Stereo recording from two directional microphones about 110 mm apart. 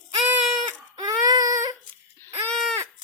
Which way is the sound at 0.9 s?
35° right (ahead or behind).